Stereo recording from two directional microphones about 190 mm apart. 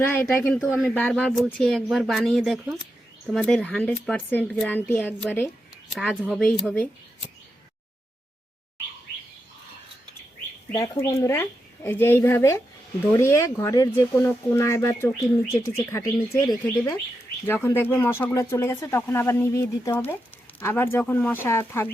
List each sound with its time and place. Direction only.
0.0 s speech: 10° left (ahead or behind)
5.9 s speech: centre (ahead or behind)
10.8 s speech: 15° left (ahead or behind)